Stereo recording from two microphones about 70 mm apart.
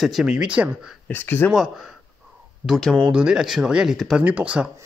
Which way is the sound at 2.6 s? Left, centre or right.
Left.